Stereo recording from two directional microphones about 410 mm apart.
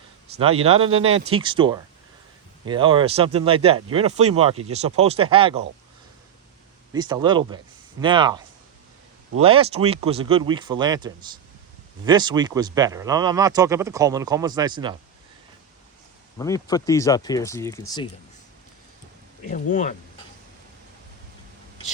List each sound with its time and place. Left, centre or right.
0.3 s speech: centre
6.9 s speech: centre
9.4 s speech: centre
16.4 s speech: centre
19.5 s speech: centre